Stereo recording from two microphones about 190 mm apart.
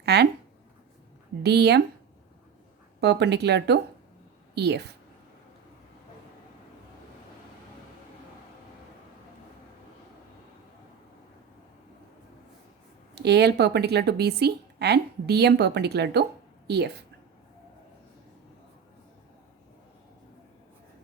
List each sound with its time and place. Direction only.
0.0 s speech: 60° right (ahead or behind)
1.4 s a woman's voice: 60° right (ahead or behind)
3.0 s a woman's voice: 65° right (ahead or behind)
13.1 s a woman's voice: 60° right (ahead or behind)